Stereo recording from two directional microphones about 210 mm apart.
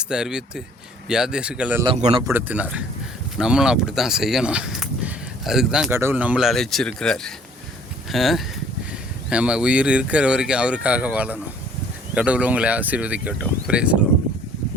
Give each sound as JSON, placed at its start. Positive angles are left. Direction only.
{"t": 0.0, "sound": "speech", "side_deg": -5}
{"t": 1.8, "sound": "speech", "side_deg": -30}
{"t": 2.2, "sound": "speech", "side_deg": -10}